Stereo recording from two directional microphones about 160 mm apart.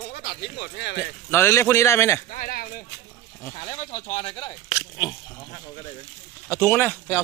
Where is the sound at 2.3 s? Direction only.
60° left (ahead or behind).